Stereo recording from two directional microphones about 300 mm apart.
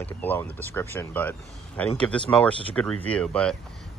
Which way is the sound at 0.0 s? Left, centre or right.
Centre.